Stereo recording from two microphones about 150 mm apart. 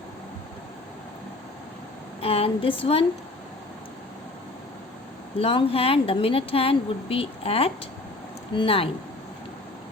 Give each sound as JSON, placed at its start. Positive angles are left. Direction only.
{"t": 2.2, "sound": "speech", "side_deg": 40}
{"t": 5.4, "sound": "speech", "side_deg": 40}